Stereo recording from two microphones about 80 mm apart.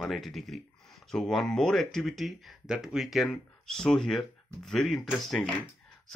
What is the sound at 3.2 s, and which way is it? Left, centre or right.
Speech, centre.